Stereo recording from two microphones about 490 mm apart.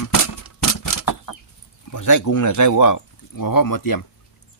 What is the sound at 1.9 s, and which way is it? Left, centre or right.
Speech, left.